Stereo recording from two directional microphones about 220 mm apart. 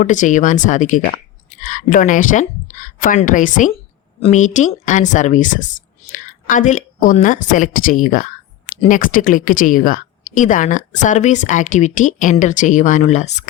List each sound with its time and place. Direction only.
0.0 s a woman's voice: 35° left (ahead or behind)